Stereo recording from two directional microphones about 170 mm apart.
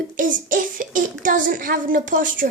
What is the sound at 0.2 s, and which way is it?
A child's voice, 50° right (ahead or behind).